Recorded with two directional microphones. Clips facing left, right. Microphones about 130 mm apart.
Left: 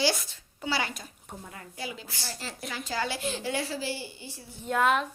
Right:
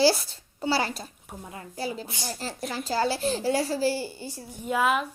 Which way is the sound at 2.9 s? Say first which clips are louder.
Right 6 dB; 35° right (ahead or behind).